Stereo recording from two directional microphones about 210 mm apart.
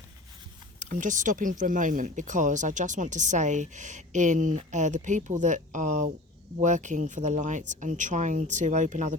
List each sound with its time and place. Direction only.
0.8 s speech: 35° right (ahead or behind)